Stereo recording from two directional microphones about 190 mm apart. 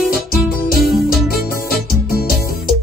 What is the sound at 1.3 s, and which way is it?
Music, 50° left (ahead or behind).